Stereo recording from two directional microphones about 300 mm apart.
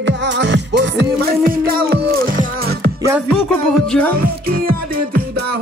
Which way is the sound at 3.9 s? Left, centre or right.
Centre.